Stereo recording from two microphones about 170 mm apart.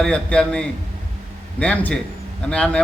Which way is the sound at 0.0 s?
5° left (ahead or behind).